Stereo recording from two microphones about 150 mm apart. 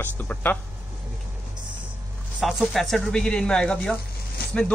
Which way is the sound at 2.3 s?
Centre (ahead or behind).